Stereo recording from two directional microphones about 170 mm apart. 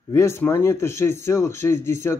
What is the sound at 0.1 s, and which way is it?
Speech, 15° left (ahead or behind).